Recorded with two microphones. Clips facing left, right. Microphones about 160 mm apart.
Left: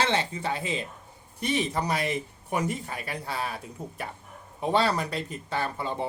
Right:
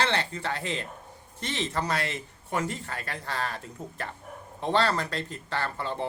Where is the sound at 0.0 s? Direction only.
15° left (ahead or behind).